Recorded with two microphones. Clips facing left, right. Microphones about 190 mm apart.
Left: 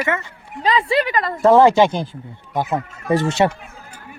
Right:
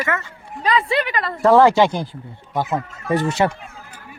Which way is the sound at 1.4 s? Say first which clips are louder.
Left 1 dB; 20° left (ahead or behind).